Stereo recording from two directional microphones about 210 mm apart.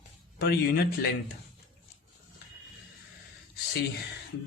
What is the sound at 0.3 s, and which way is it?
Speech, 45° left (ahead or behind).